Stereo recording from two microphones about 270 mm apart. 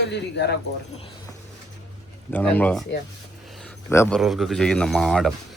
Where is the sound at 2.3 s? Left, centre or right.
Centre.